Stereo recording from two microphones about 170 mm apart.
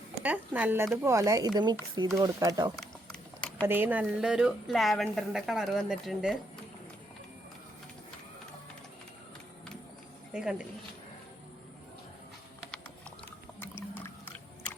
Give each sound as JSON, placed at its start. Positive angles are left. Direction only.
{"t": 0.2, "sound": "speech", "side_deg": -10}
{"t": 2.8, "sound": "a sound", "side_deg": 5}
{"t": 3.7, "sound": "speech", "side_deg": -10}